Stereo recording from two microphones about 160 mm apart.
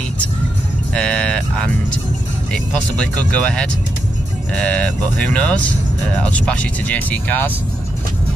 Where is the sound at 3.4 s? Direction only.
5° left (ahead or behind).